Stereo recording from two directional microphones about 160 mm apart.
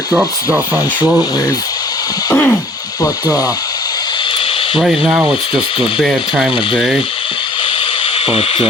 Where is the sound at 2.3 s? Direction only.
15° left (ahead or behind).